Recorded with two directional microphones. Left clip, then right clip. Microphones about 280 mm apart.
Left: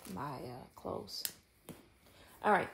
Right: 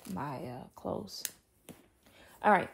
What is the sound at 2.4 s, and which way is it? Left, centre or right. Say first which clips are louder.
Speech: right 4 dB; centre.